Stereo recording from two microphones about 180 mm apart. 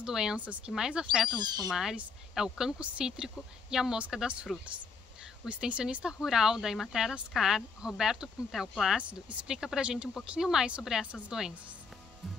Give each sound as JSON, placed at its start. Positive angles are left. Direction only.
{"t": 0.0, "sound": "speech", "side_deg": -5}
{"t": 1.4, "sound": "speech", "side_deg": -25}
{"t": 1.7, "sound": "speech", "side_deg": 0}